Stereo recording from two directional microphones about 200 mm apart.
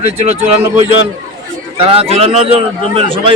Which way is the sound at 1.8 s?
30° right (ahead or behind).